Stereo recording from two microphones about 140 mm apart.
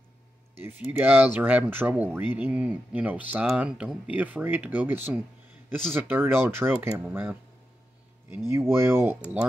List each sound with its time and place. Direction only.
0.6 s speech: 15° right (ahead or behind)
8.5 s speech: 20° right (ahead or behind)